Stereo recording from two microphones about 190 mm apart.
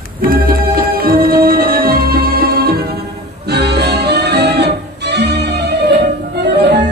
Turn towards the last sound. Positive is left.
turn(degrees=-60)  # may be behind; listen again after turning